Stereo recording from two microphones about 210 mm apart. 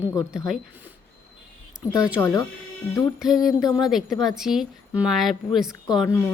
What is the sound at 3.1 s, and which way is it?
A woman's voice, centre (ahead or behind).